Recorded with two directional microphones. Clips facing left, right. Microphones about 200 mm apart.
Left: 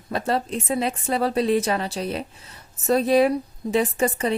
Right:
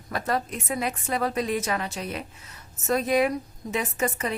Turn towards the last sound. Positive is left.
turn(degrees=30)  # may be behind; listen again after turning